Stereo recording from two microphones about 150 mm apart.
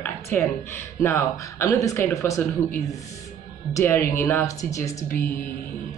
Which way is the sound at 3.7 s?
15° left (ahead or behind).